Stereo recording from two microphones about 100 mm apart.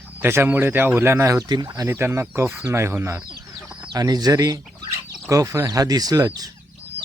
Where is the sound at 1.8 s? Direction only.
25° right (ahead or behind).